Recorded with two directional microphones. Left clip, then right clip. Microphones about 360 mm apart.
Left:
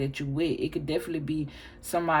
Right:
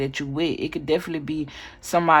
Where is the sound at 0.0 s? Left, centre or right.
Centre.